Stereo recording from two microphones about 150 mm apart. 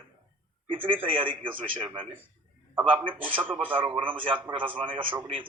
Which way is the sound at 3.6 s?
35° right (ahead or behind).